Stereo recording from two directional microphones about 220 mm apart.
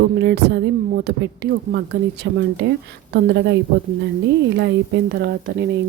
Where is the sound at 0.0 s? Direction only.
50° right (ahead or behind).